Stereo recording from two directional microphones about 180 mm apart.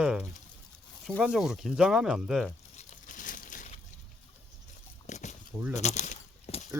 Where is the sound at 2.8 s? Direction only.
45° left (ahead or behind).